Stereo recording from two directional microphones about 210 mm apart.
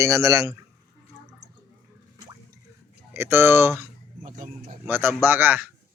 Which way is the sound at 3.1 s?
10° right (ahead or behind).